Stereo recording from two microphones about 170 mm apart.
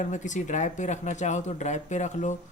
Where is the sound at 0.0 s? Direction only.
45° left (ahead or behind).